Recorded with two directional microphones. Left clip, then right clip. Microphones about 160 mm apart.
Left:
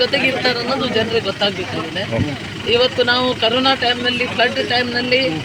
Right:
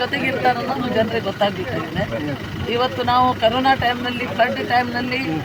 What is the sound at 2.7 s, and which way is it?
Speech, 45° right (ahead or behind).